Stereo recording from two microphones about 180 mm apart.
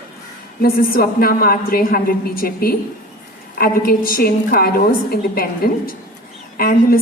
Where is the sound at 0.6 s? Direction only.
55° left (ahead or behind).